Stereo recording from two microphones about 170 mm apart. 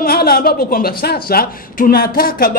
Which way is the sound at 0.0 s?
65° left (ahead or behind).